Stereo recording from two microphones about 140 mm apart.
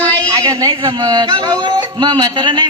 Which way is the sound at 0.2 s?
30° right (ahead or behind).